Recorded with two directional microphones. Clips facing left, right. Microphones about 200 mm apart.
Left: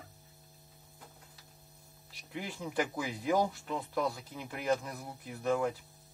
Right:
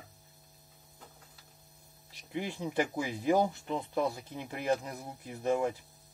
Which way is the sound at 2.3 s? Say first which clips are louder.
Right 3 dB; 20° right (ahead or behind).